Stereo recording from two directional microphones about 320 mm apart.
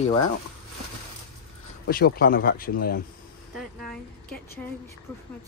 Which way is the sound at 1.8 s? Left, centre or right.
Left.